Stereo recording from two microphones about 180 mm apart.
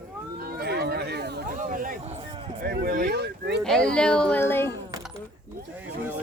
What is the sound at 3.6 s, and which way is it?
Speech, 5° left (ahead or behind).